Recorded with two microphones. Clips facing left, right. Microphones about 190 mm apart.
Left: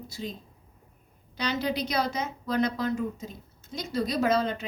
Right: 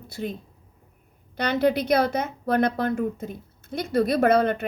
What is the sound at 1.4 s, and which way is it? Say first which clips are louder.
A woman's voice: right 7 dB; 55° right (ahead or behind).